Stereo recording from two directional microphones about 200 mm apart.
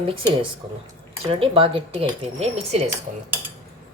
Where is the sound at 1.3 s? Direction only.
30° right (ahead or behind).